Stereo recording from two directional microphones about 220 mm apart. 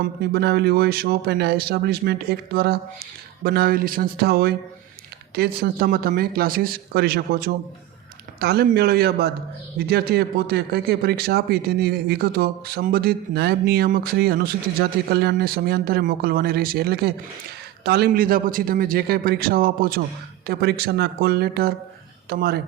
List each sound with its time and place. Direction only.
0.0 s speech: 50° right (ahead or behind)